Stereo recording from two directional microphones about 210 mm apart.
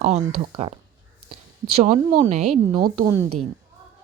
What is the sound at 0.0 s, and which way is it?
Speech, 30° right (ahead or behind).